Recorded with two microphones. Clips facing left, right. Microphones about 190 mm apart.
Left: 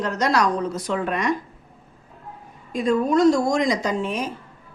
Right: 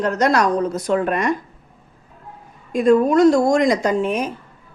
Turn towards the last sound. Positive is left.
turn(degrees=-55)  # may be behind; listen again after turning